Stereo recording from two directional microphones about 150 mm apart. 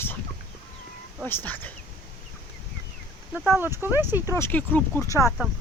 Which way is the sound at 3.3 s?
15° right (ahead or behind).